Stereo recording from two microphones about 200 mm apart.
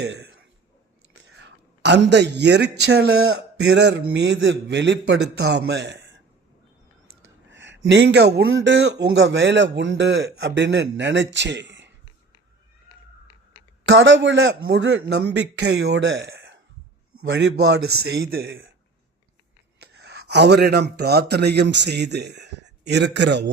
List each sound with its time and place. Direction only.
1.4 s a man's voice: 60° right (ahead or behind)
7.5 s a sound: 65° right (ahead or behind)
7.9 s a man's voice: 60° right (ahead or behind)
8.4 s a man's voice: 75° right (ahead or behind)
13.8 s a man's voice: 70° right (ahead or behind)
17.6 s a man's voice: 90° right
18.1 s speech: 50° right (ahead or behind)
20.0 s a man's voice: 55° right (ahead or behind)